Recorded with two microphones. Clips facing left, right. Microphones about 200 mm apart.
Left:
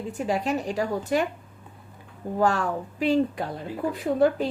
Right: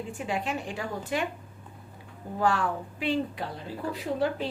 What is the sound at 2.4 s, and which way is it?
A woman's voice, 45° left (ahead or behind).